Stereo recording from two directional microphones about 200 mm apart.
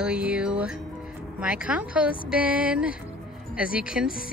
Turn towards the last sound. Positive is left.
turn(degrees=-5)  # may be behind; listen again after turning